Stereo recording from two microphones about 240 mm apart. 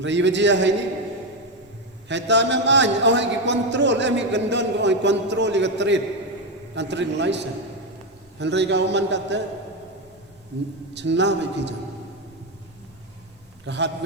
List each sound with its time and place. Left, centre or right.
0.0 s a man's voice: right
2.0 s a man's voice: right
10.9 s a man's voice: right
13.7 s a man's voice: right